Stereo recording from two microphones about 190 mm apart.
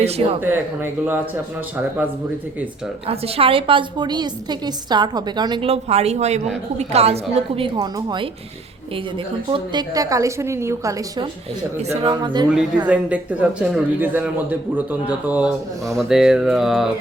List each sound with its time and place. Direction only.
0.0 s speech: 35° right (ahead or behind)
0.3 s a woman's voice: 10° right (ahead or behind)
3.1 s a woman's voice: 30° right (ahead or behind)
12.9 s a woman's voice: 5° right (ahead or behind)